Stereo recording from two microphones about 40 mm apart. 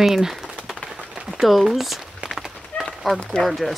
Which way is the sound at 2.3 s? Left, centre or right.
Centre.